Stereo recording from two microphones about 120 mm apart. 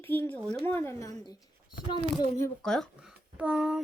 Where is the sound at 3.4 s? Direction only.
10° right (ahead or behind).